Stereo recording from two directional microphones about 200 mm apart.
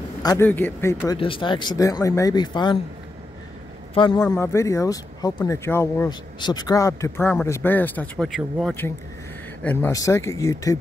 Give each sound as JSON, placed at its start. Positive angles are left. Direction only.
{"t": 0.2, "sound": "speech", "side_deg": 15}
{"t": 1.1, "sound": "speech", "side_deg": 25}
{"t": 3.9, "sound": "speech", "side_deg": 25}